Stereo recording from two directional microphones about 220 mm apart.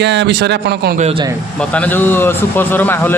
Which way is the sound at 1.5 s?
5° left (ahead or behind).